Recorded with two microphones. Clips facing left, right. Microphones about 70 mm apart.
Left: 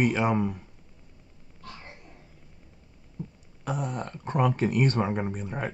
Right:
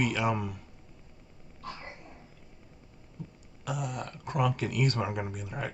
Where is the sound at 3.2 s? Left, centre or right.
Left.